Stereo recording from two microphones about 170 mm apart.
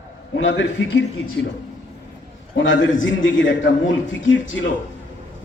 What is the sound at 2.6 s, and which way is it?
A man's voice, 90° left.